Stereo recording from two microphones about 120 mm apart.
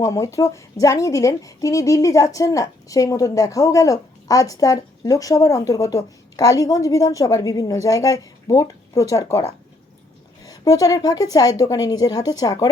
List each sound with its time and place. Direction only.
0.0 s a woman's voice: 25° left (ahead or behind)